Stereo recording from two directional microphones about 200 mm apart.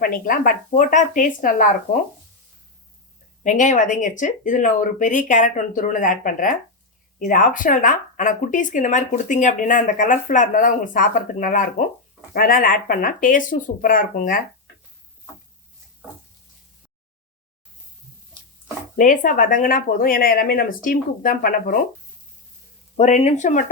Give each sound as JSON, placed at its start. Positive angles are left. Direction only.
{"t": 0.0, "sound": "speech", "side_deg": 45}
{"t": 3.4, "sound": "speech", "side_deg": 40}
{"t": 18.9, "sound": "speech", "side_deg": 40}
{"t": 23.0, "sound": "speech", "side_deg": 35}